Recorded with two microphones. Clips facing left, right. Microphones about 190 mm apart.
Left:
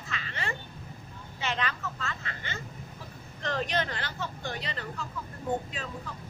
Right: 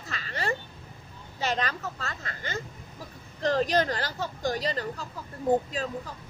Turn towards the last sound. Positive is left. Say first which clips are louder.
# right 7 dB
turn(degrees=-35)  # may be behind; listen again after turning